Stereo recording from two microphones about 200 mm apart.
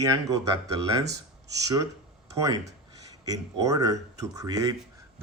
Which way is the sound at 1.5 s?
15° right (ahead or behind).